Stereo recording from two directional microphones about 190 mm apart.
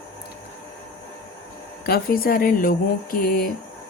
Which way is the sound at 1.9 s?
50° left (ahead or behind).